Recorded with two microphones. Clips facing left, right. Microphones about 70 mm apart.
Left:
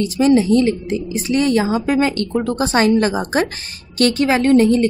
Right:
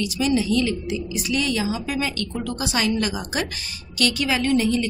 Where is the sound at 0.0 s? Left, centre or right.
Left.